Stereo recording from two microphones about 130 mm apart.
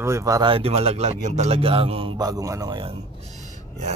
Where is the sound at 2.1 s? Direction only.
30° right (ahead or behind).